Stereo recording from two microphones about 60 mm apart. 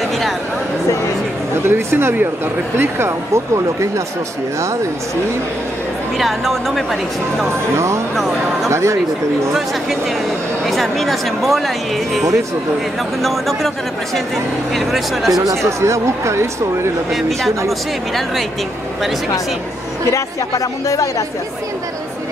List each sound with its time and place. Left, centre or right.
1.6 s speech: right
6.1 s speech: centre
7.4 s speech: right
10.7 s speech: centre
14.9 s speech: centre
15.5 s speech: right
17.1 s speech: centre
20.1 s speech: left